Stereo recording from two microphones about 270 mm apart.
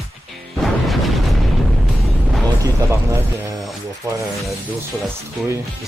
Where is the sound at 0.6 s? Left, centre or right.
Centre.